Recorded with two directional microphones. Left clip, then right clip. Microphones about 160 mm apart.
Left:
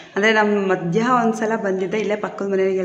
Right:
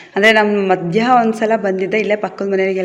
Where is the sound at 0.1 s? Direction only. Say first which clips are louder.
Right 5 dB; 25° right (ahead or behind).